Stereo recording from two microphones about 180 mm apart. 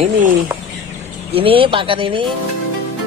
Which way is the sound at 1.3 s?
30° right (ahead or behind).